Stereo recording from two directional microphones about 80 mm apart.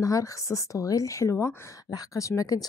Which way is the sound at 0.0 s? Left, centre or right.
Left.